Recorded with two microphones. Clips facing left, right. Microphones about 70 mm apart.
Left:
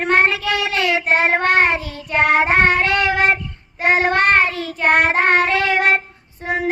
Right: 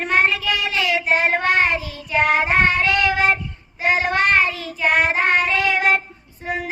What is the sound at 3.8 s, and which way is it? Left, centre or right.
Child singing, left.